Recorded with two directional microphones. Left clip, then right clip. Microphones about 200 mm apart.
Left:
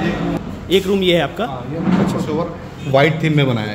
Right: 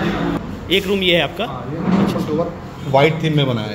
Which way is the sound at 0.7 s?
30° left (ahead or behind).